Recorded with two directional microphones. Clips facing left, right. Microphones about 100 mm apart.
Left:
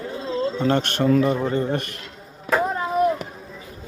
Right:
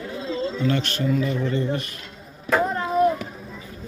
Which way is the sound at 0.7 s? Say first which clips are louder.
Left 5 dB; 50° left (ahead or behind).